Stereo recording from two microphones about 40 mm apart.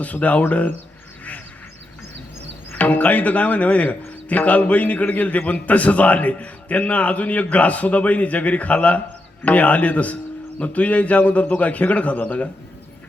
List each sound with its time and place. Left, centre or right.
0.0 s a man's voice: left
2.7 s a man's voice: left